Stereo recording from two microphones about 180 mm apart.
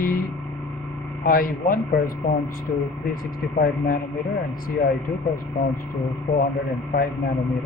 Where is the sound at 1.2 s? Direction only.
50° left (ahead or behind).